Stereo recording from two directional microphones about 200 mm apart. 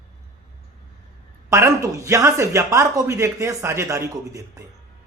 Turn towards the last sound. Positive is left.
turn(degrees=-15)  # may be behind; listen again after turning